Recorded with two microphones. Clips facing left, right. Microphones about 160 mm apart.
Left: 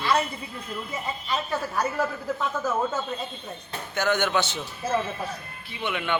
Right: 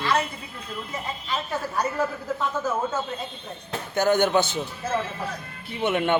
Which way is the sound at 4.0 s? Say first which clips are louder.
Right 4 dB; 40° right (ahead or behind).